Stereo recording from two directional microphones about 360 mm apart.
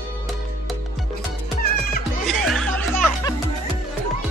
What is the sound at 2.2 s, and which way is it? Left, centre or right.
Music, centre.